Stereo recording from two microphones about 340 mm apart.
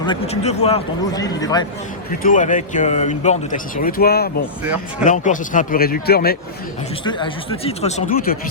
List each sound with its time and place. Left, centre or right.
0.0 s speech: centre
2.0 s a man's voice: left
7.0 s speech: centre